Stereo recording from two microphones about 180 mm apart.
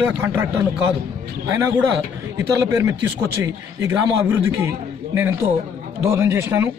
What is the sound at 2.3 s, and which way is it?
Speech, 15° right (ahead or behind).